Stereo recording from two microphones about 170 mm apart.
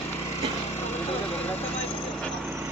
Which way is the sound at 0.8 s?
40° left (ahead or behind).